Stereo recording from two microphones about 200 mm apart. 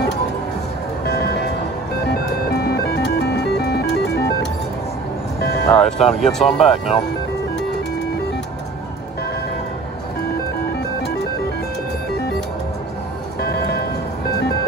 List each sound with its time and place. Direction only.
1.0 s music: 50° left (ahead or behind)
5.7 s speech: 5° left (ahead or behind)